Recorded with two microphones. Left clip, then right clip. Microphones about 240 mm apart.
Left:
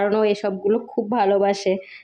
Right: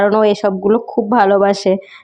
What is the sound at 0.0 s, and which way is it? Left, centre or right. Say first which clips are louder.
Speech: right 7 dB; right.